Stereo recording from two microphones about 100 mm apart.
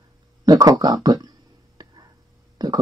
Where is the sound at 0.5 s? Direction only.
40° right (ahead or behind).